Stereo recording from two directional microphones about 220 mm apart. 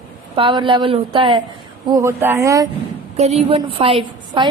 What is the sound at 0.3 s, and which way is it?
A woman's voice, 25° right (ahead or behind).